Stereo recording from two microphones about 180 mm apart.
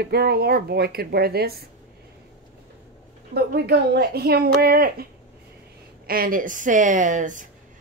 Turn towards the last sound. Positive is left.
turn(degrees=-45)  # may be behind; listen again after turning